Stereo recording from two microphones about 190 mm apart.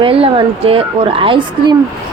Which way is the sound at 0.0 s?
30° right (ahead or behind).